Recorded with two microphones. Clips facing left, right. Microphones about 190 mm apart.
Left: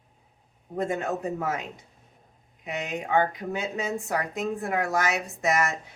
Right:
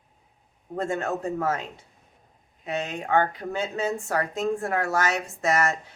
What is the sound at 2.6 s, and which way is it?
Speech, 15° left (ahead or behind).